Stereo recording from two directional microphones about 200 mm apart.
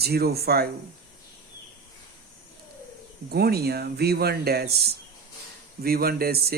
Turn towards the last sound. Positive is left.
turn(degrees=-50)  # may be behind; listen again after turning